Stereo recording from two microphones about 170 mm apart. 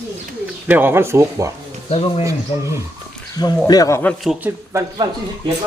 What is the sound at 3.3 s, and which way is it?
Speech, 20° left (ahead or behind).